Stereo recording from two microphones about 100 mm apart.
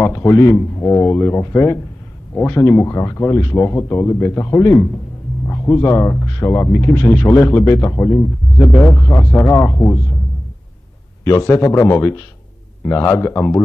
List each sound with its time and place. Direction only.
0.0 s a man's voice: 25° left (ahead or behind)
11.2 s speech: 30° left (ahead or behind)